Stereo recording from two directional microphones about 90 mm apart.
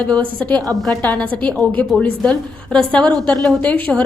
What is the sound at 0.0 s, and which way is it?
A woman's voice, 15° left (ahead or behind).